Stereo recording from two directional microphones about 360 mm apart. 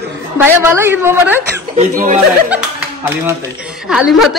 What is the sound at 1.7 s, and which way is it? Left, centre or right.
Speech, right.